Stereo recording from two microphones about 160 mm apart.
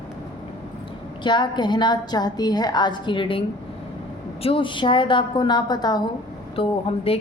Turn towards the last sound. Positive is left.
turn(degrees=35)  # may be behind; listen again after turning